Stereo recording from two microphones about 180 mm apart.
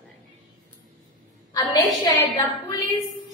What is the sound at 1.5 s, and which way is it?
Speech, 20° left (ahead or behind).